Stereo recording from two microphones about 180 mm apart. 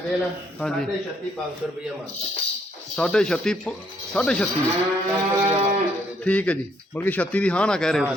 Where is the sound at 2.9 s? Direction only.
5° left (ahead or behind).